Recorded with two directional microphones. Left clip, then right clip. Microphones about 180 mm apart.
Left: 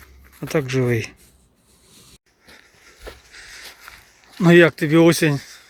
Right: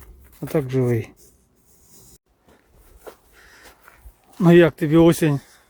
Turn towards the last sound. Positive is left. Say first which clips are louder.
# left 2 dB
turn(degrees=-20)  # may be behind; listen again after turning